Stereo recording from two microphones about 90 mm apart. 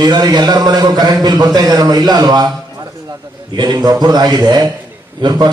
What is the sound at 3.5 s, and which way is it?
Speech, 50° right (ahead or behind).